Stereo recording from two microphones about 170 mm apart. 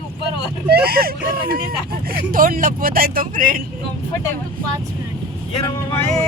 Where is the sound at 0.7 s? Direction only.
65° right (ahead or behind).